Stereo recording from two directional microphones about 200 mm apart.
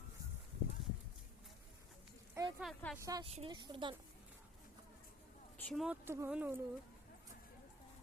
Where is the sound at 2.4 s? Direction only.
15° right (ahead or behind).